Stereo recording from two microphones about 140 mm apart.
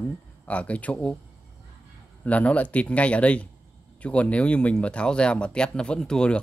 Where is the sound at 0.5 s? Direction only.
10° left (ahead or behind).